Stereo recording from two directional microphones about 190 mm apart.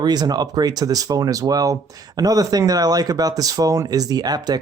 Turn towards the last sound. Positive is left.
turn(degrees=-20)  # may be behind; listen again after turning